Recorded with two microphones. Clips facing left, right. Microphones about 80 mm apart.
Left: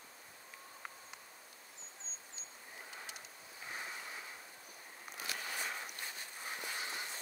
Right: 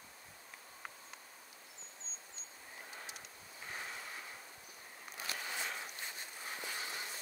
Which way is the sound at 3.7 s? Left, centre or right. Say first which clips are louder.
Even; centre.